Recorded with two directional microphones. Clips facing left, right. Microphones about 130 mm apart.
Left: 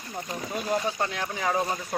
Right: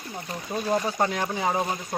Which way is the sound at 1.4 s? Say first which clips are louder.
Left 2 dB; 25° right (ahead or behind).